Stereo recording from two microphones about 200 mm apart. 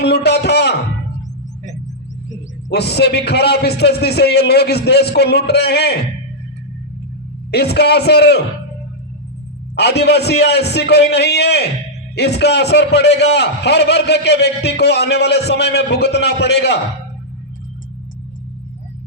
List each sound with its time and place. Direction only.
0.0 s music: 55° left (ahead or behind)
2.6 s a man's voice: 55° left (ahead or behind)
7.5 s a man's voice: 55° left (ahead or behind)
9.7 s a man's voice: 55° left (ahead or behind)